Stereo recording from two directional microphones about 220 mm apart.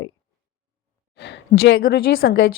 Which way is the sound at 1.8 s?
40° left (ahead or behind).